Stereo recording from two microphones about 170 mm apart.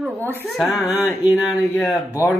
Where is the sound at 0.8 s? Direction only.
20° left (ahead or behind).